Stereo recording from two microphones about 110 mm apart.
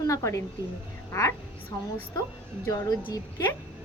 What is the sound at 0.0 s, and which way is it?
Speech, 30° left (ahead or behind).